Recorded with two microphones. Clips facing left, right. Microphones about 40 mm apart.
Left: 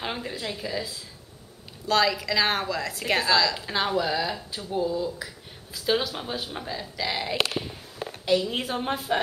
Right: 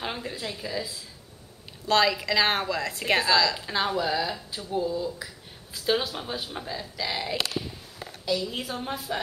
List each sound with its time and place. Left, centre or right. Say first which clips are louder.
0.0 s speech: left 1 dB; centre
1.9 s a woman's voice: even; centre
3.3 s speech: even; centre
8.0 s speech: left 5 dB; left